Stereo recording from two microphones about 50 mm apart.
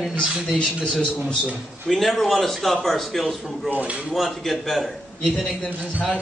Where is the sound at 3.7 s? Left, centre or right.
Right.